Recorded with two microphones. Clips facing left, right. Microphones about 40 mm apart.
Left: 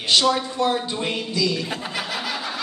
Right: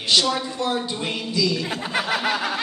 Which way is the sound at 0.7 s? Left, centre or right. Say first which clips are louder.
Left 2 dB; centre.